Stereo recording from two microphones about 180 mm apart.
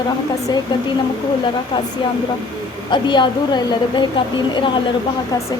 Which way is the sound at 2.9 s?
25° left (ahead or behind).